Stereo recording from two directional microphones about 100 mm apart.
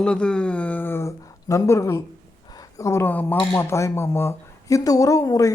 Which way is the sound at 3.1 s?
15° left (ahead or behind).